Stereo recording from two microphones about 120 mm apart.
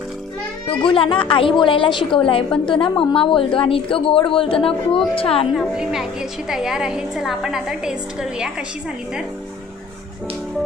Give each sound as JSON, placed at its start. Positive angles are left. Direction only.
{"t": 0.7, "sound": "a woman's voice", "side_deg": 45}
{"t": 5.5, "sound": "a woman's voice", "side_deg": -5}